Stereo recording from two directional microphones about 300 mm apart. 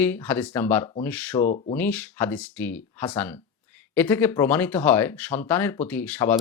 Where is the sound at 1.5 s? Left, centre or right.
Left.